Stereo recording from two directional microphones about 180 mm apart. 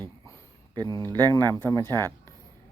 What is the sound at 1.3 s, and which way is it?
Speech, 20° right (ahead or behind).